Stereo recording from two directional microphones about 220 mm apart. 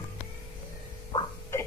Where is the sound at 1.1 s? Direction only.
15° left (ahead or behind).